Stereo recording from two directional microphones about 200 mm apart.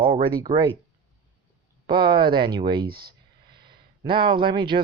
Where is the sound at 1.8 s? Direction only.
25° right (ahead or behind).